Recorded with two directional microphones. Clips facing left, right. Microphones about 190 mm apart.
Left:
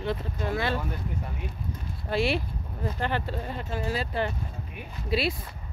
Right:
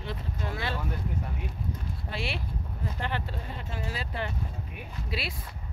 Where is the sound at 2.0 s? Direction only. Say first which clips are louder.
Left 10 dB; 40° left (ahead or behind).